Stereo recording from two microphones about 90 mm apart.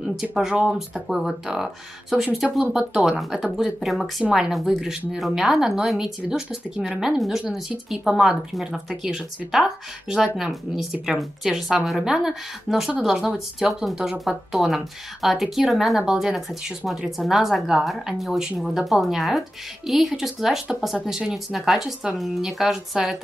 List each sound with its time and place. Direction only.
0.0 s speech: 5° right (ahead or behind)